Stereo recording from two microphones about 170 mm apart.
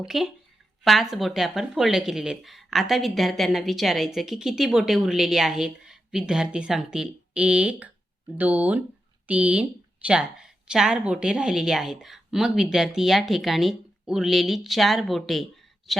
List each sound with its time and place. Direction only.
0.1 s a woman's voice: centre (ahead or behind)